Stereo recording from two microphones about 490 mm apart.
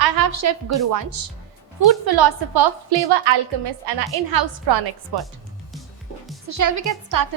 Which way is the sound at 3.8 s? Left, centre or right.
Right.